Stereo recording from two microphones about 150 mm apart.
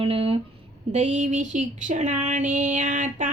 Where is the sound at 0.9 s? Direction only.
50° right (ahead or behind).